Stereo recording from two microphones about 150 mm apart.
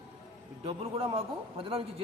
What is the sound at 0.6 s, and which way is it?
A man's voice, 40° right (ahead or behind).